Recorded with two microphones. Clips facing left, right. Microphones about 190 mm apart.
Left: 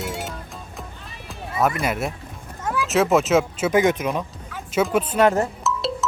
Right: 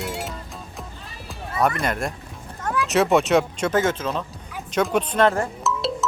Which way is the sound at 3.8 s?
15° left (ahead or behind).